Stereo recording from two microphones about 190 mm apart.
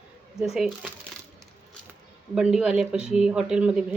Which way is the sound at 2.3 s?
5° right (ahead or behind).